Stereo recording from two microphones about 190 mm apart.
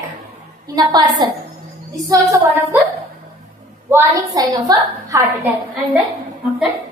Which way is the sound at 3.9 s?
15° right (ahead or behind).